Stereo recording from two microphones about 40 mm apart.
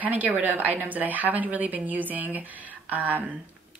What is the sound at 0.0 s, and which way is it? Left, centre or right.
Speech, right.